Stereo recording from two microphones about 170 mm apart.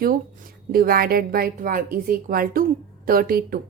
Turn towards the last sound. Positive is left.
turn(degrees=-60)  # may be behind; listen again after turning